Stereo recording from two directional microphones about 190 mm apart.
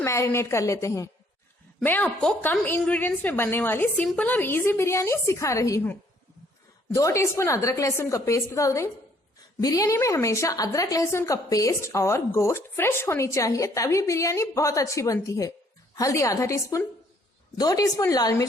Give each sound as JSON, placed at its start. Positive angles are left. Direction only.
{"t": 0.0, "sound": "a woman's voice", "side_deg": 15}